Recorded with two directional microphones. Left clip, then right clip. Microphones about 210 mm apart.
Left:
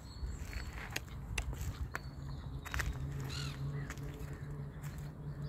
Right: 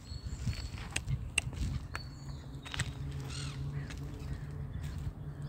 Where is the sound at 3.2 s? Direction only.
50° left (ahead or behind).